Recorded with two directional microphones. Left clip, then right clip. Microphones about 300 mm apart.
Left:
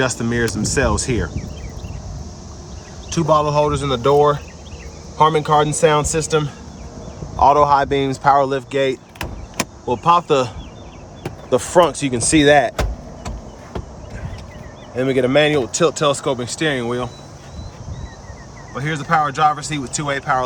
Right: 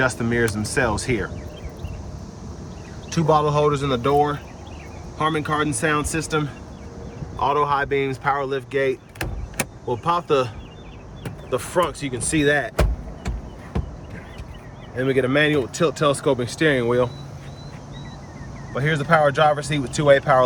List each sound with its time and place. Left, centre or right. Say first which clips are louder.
0.0 s speech: left 1 dB; centre
3.1 s speech: left 3 dB; centre
11.5 s speech: left 8 dB; centre
14.9 s speech: left 4 dB; centre
18.7 s speech: even; centre